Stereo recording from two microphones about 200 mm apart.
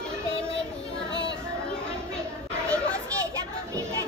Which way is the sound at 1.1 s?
60° left (ahead or behind).